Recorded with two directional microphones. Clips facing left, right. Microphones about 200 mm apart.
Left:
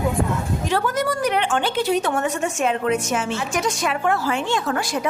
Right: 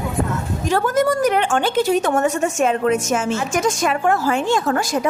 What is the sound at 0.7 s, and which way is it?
A woman's voice, 45° right (ahead or behind).